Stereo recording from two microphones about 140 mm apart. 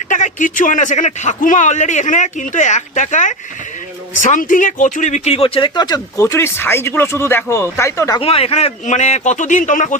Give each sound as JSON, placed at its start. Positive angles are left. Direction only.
{"t": 0.1, "sound": "a man's voice", "side_deg": 65}
{"t": 8.2, "sound": "a man's voice", "side_deg": 45}